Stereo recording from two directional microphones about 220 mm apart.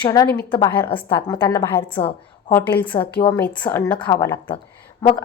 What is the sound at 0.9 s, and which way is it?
A woman's voice, 25° left (ahead or behind).